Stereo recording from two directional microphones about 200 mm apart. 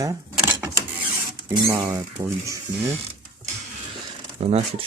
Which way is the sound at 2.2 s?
25° right (ahead or behind).